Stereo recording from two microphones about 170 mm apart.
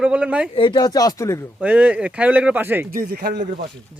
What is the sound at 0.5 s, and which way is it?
Speech, 30° left (ahead or behind).